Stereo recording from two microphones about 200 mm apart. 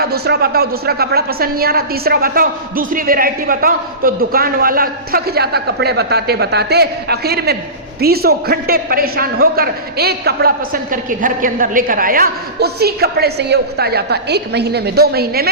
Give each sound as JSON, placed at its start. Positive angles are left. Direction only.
{"t": 0.0, "sound": "a woman's voice", "side_deg": -50}